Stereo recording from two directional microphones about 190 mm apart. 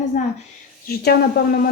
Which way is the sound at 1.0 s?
55° left (ahead or behind).